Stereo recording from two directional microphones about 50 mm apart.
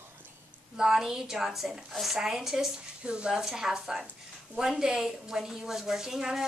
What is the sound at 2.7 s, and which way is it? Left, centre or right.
A woman's voice, centre.